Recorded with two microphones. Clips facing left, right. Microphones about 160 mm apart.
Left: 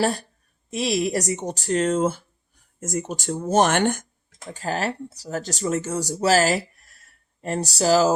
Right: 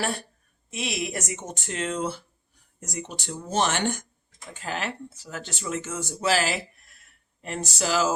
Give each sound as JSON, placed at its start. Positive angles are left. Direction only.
{"t": 0.7, "sound": "speech", "side_deg": 35}
{"t": 4.5, "sound": "speech", "side_deg": 40}